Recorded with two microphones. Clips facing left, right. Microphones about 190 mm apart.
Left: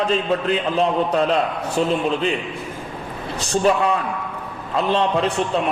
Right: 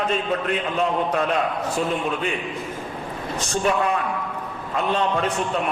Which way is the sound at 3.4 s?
35° left (ahead or behind).